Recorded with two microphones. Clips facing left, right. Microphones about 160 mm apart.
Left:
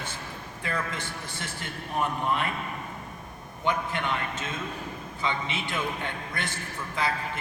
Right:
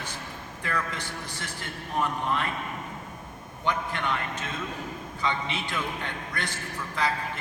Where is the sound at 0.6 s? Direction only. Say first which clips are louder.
Even; 25° left (ahead or behind).